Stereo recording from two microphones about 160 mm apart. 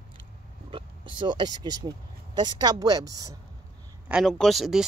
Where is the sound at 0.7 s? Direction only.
30° right (ahead or behind).